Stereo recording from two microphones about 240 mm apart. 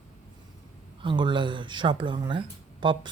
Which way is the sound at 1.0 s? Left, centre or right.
Centre.